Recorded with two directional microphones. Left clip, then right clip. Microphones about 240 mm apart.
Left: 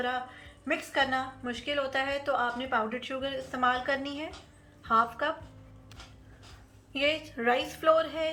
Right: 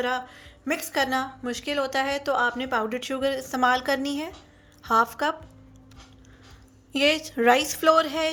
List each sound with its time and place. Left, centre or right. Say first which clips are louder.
0.0 s a woman's voice: right 5 dB; right
6.9 s a woman's voice: right 6 dB; right